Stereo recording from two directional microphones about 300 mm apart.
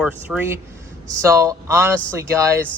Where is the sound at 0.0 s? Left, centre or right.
Centre.